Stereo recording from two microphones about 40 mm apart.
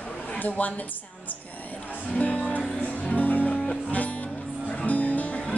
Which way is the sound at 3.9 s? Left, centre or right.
Left.